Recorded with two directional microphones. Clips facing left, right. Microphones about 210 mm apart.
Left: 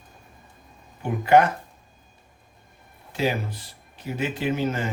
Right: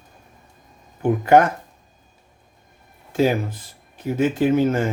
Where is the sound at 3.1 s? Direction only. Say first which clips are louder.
Right 6 dB; 50° right (ahead or behind).